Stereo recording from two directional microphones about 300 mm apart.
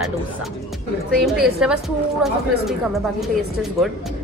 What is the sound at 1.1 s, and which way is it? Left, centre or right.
Speech, centre.